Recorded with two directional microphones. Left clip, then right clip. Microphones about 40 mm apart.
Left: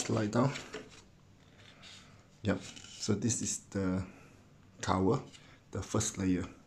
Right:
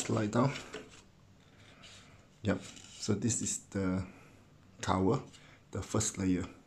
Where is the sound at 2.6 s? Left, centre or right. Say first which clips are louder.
Left 2 dB; left.